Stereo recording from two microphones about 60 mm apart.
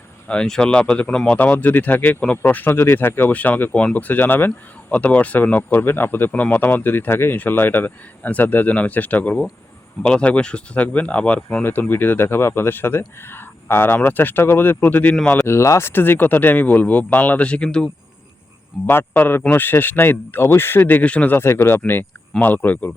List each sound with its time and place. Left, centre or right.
0.4 s speech: centre
1.1 s speech: centre
1.4 s speech: left
4.9 s speech: left
11.6 s speech: left
15.4 s speech: left
15.9 s speech: left; by 17.9 s centre
18.9 s speech: left
21.0 s speech: left
21.3 s speech: left